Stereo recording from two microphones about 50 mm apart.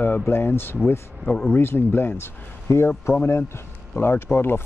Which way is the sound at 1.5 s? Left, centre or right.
Left.